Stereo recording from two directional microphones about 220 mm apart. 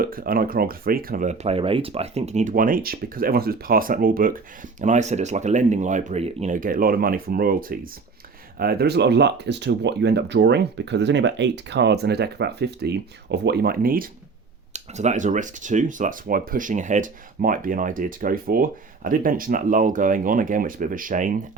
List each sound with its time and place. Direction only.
0.0 s speech: 40° right (ahead or behind)